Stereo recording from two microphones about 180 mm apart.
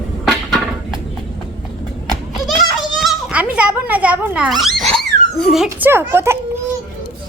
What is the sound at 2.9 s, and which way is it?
A child's voice, 5° right (ahead or behind).